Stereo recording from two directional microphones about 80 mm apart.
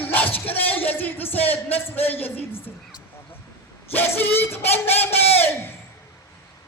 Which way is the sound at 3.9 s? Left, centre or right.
Left.